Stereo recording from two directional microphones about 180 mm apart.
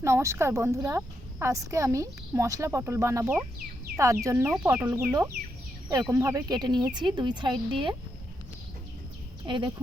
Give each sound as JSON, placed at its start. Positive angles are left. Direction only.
{"t": 0.0, "sound": "speech", "side_deg": -15}
{"t": 9.5, "sound": "speech", "side_deg": -25}